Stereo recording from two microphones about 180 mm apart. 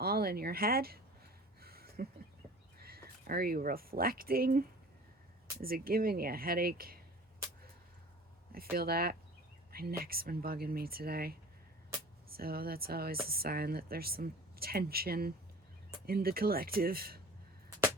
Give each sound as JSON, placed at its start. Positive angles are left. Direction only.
{"t": 0.0, "sound": "a sound", "side_deg": -60}
{"t": 3.2, "sound": "speech", "side_deg": -55}
{"t": 5.6, "sound": "speech", "side_deg": -55}
{"t": 8.7, "sound": "speech", "side_deg": -60}